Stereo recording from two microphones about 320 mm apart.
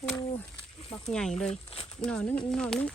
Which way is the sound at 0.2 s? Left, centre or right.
Centre.